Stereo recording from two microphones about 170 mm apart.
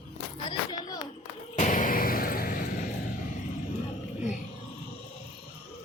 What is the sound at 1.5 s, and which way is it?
Vehicle, 50° left (ahead or behind).